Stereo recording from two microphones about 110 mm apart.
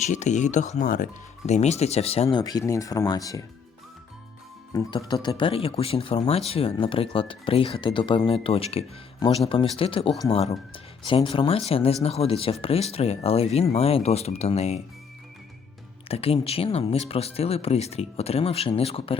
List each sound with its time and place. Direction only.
0.0 s speech: 90° left; by 2.2 s 70° left (ahead or behind)
2.3 s speech: 35° left (ahead or behind)
5.0 s speech: 40° left (ahead or behind)
5.4 s speech: 55° left (ahead or behind)
11.0 s speech: 50° left (ahead or behind); by 14.8 s 75° left (ahead or behind)
16.0 s speech: 60° left (ahead or behind)